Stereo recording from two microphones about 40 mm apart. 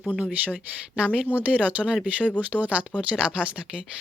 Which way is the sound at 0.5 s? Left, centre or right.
Right.